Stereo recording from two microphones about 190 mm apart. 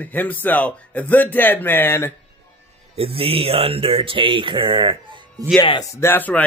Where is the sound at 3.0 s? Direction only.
30° right (ahead or behind).